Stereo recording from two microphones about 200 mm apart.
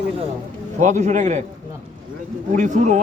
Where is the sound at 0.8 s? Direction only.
35° right (ahead or behind).